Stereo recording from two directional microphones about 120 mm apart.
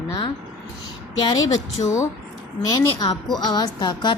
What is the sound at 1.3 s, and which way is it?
Music, 30° left (ahead or behind).